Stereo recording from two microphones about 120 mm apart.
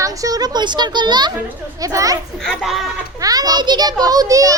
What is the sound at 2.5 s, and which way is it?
Speech, centre (ahead or behind).